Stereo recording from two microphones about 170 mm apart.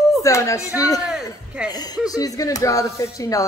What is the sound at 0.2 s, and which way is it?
Speech, 20° left (ahead or behind).